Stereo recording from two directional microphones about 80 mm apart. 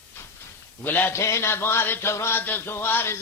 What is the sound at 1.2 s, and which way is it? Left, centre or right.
Mantra, left.